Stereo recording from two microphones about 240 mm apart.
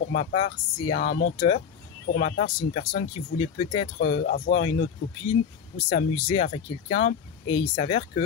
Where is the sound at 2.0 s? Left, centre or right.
Left.